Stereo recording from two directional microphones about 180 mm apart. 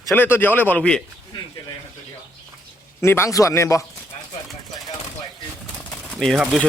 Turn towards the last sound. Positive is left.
turn(degrees=0)  # may be behind; listen again after turning